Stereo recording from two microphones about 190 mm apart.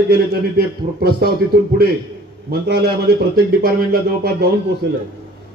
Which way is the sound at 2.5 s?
55° right (ahead or behind).